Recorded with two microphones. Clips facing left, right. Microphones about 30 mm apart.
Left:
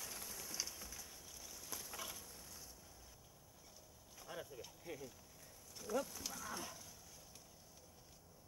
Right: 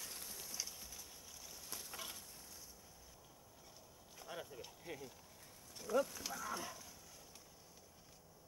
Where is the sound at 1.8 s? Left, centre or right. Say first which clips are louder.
Even; centre.